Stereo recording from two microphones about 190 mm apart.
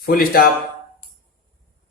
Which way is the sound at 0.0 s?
50° left (ahead or behind).